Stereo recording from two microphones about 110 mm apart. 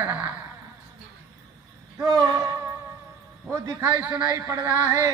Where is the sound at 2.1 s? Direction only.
35° right (ahead or behind).